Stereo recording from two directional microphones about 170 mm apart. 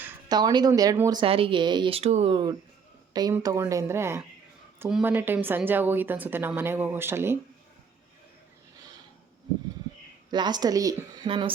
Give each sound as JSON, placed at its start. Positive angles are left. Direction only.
{"t": 0.3, "sound": "a woman's voice", "side_deg": -25}
{"t": 1.2, "sound": "speech", "side_deg": -30}
{"t": 2.3, "sound": "a woman's voice", "side_deg": -25}
{"t": 10.3, "sound": "a woman's voice", "side_deg": -25}